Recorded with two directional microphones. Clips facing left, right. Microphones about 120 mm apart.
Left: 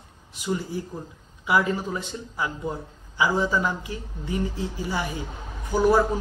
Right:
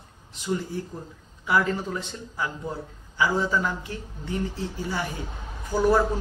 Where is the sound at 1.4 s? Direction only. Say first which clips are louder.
Left 1 dB; 15° left (ahead or behind).